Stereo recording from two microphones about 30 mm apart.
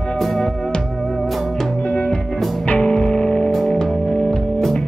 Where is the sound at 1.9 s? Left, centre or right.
Left.